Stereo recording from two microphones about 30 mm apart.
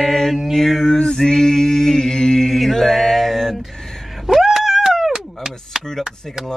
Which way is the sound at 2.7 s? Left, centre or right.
Centre.